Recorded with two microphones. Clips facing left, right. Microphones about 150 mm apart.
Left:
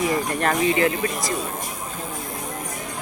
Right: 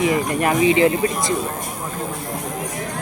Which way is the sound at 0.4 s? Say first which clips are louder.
Right 5 dB; 15° right (ahead or behind).